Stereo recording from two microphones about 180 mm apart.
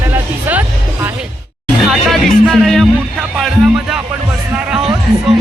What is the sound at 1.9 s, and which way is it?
Music, centre (ahead or behind).